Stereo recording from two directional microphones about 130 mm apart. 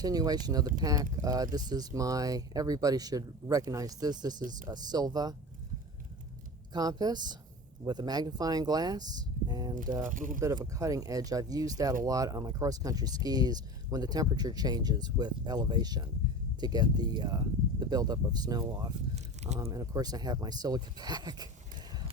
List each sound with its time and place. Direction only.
0.0 s speech: 30° right (ahead or behind)
6.7 s speech: 30° right (ahead or behind)
10.0 s speech: 90° right
10.4 s speech: 25° right (ahead or behind)